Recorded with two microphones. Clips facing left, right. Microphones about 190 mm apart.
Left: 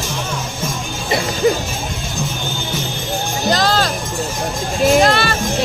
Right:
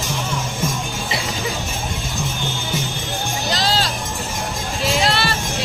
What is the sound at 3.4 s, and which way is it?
Music, 50° left (ahead or behind).